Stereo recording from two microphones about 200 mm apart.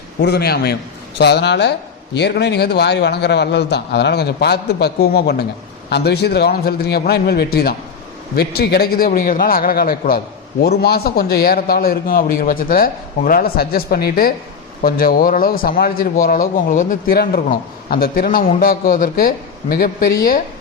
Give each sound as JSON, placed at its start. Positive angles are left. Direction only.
{"t": 0.2, "sound": "a man's voice", "side_deg": 55}